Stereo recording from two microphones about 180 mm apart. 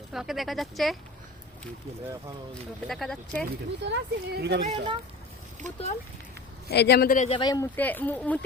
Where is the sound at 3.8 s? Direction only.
75° right (ahead or behind).